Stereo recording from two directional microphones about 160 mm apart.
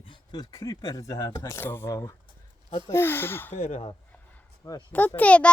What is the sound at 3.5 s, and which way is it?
Speech, 45° left (ahead or behind).